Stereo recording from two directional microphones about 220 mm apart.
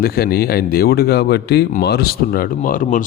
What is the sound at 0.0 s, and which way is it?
Speech, 45° left (ahead or behind).